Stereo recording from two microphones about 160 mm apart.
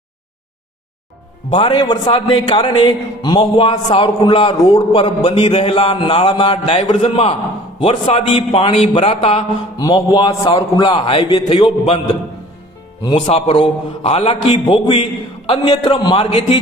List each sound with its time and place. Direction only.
1.5 s a man's voice: 30° left (ahead or behind)
9.7 s a man's voice: 25° left (ahead or behind)
13.1 s a man's voice: 35° left (ahead or behind)